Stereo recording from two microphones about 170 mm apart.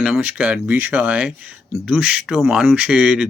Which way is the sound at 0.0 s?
5° right (ahead or behind).